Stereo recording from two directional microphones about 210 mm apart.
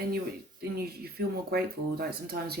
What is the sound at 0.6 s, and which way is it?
Speech, 50° right (ahead or behind).